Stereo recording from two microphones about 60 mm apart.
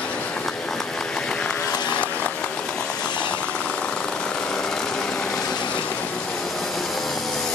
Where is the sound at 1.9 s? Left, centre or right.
Left.